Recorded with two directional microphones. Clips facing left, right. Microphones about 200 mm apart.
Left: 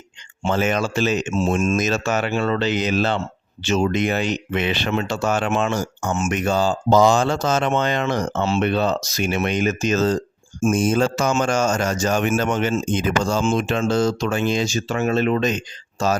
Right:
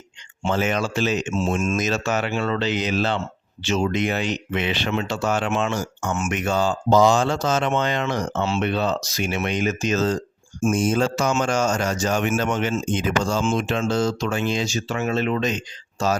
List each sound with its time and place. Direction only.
0.4 s speech: 45° left (ahead or behind)
6.9 s speech: 45° left (ahead or behind)